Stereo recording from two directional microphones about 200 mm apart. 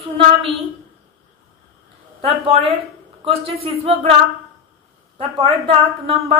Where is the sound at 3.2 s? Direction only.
30° right (ahead or behind).